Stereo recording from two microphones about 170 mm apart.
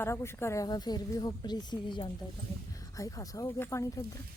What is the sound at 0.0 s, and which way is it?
A woman's voice, 15° left (ahead or behind).